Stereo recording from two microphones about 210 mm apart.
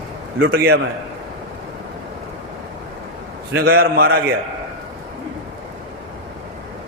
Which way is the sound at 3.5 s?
45° right (ahead or behind).